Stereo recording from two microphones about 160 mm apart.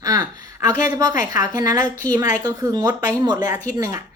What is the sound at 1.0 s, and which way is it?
A woman's voice, 20° right (ahead or behind).